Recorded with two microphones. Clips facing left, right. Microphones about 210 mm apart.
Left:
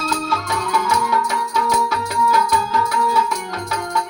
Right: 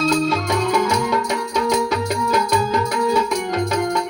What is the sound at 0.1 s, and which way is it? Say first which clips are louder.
Music: right 5 dB; 20° right (ahead or behind).